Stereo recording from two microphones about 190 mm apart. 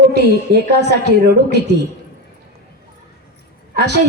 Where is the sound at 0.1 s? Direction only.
60° right (ahead or behind).